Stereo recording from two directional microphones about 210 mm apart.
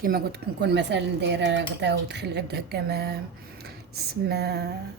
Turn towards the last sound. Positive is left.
turn(degrees=-50)  # may be behind; listen again after turning